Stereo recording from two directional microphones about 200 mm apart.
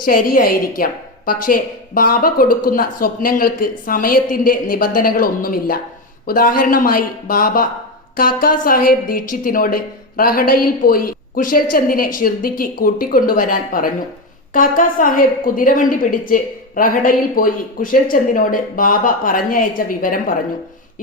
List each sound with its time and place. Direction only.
0.0 s a woman's voice: 45° left (ahead or behind)